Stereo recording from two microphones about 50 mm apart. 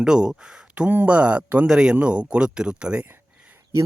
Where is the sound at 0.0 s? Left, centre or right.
Centre.